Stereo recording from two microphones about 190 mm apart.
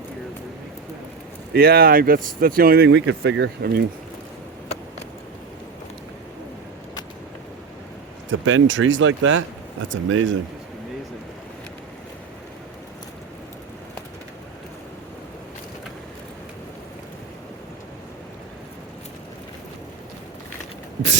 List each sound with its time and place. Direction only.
1.5 s speech: 50° right (ahead or behind)
8.3 s speech: 85° right